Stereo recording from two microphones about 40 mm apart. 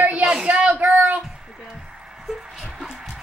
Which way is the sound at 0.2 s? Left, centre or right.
Centre.